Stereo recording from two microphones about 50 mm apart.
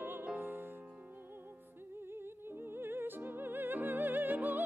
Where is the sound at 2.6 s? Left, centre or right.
Right.